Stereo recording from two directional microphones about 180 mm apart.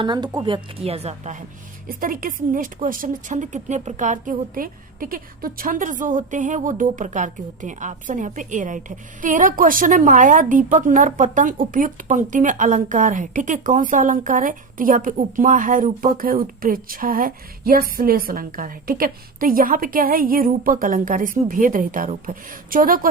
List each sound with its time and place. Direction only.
0.0 s a woman's voice: 25° right (ahead or behind); by 23.0 s 50° right (ahead or behind)